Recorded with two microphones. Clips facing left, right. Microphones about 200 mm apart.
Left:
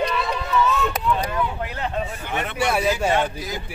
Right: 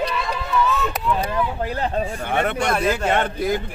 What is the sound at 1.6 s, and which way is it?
Speech, 35° right (ahead or behind).